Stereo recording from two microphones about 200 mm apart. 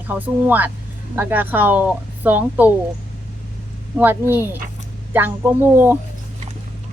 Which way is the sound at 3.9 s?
10° right (ahead or behind).